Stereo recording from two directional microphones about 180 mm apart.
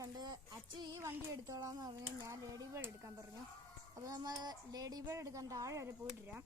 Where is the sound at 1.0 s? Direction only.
15° right (ahead or behind).